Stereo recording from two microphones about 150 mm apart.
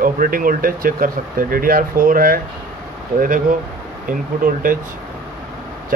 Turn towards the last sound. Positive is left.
turn(degrees=-70)  # may be behind; listen again after turning